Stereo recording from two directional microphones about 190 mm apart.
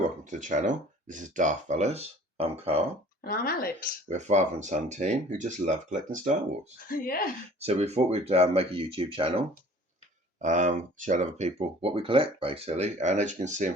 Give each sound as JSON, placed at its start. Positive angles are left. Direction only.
{"t": 0.3, "sound": "speech", "side_deg": -40}
{"t": 3.2, "sound": "speech", "side_deg": 50}
{"t": 4.1, "sound": "speech", "side_deg": -40}
{"t": 6.7, "sound": "speech", "side_deg": 45}
{"t": 7.6, "sound": "speech", "side_deg": -35}
{"t": 10.4, "sound": "speech", "side_deg": -40}